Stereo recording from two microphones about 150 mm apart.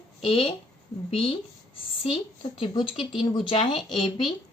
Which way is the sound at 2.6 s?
35° left (ahead or behind).